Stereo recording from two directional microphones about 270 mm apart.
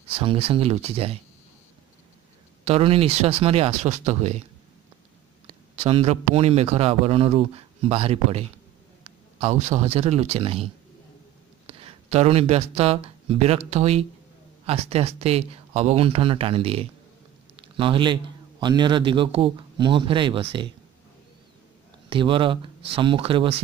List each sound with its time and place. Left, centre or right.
0.1 s a man's voice: right
2.6 s a man's voice: right
5.5 s a man's voice: right
22.1 s a man's voice: centre